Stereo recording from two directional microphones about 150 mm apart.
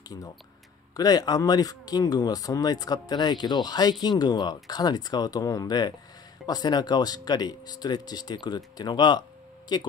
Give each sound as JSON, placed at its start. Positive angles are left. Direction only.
{"t": 0.9, "sound": "speech", "side_deg": 25}